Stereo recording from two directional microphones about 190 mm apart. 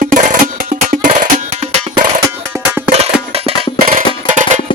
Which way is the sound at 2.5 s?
10° right (ahead or behind).